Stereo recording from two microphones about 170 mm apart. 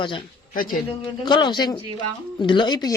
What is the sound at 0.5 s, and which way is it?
Speech, 55° left (ahead or behind).